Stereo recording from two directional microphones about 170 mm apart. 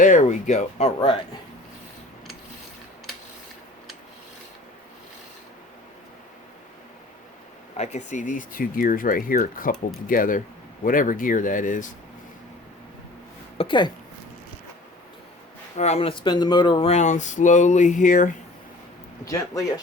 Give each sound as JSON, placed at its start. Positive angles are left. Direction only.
{"t": 0.0, "sound": "speech", "side_deg": 45}
{"t": 7.8, "sound": "speech", "side_deg": 45}
{"t": 13.6, "sound": "speech", "side_deg": 30}
{"t": 15.8, "sound": "speech", "side_deg": 35}
{"t": 19.2, "sound": "speech", "side_deg": 20}